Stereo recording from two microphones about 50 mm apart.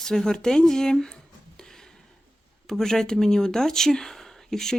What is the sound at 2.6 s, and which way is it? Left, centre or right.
Speech, centre.